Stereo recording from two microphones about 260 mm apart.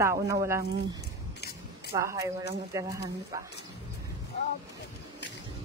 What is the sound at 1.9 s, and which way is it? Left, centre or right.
A woman's voice, centre.